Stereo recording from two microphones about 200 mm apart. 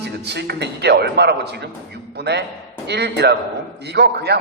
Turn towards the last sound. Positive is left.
turn(degrees=-55)  # may be behind; listen again after turning